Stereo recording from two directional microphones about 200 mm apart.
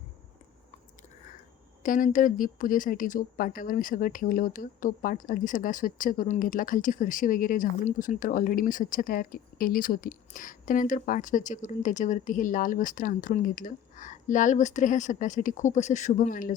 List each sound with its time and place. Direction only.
1.8 s speech: 40° left (ahead or behind)